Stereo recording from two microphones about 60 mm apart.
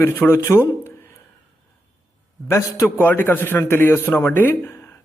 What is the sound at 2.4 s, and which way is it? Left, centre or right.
Speech, left.